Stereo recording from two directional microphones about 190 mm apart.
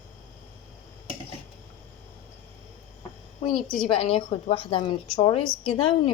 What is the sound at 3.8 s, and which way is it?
A woman's voice, 30° left (ahead or behind).